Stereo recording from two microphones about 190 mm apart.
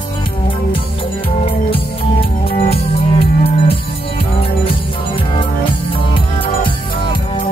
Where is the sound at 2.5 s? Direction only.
30° left (ahead or behind).